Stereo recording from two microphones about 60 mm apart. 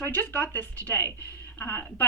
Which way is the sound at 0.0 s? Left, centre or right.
Left.